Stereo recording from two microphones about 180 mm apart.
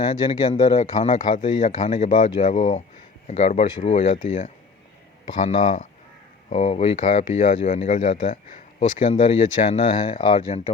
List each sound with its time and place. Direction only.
0.0 s speech: 30° left (ahead or behind)